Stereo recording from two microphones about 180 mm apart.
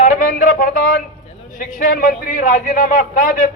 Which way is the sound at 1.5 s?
50° left (ahead or behind).